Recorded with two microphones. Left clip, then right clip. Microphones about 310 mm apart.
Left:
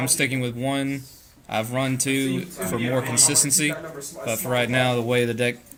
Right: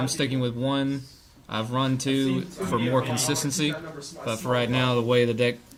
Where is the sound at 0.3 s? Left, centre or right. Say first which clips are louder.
Left 1 dB; centre.